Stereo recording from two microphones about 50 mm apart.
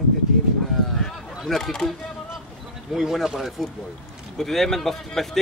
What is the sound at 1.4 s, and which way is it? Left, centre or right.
Speech, centre.